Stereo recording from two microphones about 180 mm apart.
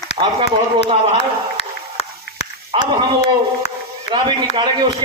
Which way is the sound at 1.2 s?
35° left (ahead or behind).